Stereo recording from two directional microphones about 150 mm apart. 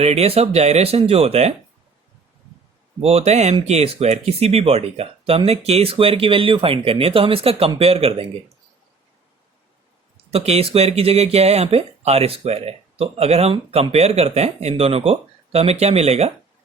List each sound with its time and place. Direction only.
0.0 s speech: 45° right (ahead or behind)
3.0 s speech: 45° right (ahead or behind)
10.3 s speech: 40° right (ahead or behind)